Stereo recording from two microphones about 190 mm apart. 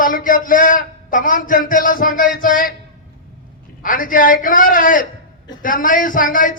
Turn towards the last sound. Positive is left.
turn(degrees=45)  # may be behind; listen again after turning